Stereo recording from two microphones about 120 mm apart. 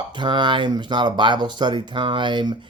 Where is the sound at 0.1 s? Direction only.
40° right (ahead or behind).